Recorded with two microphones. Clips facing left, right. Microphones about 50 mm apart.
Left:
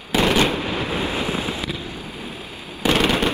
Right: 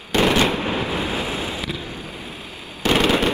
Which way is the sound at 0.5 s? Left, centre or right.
Right.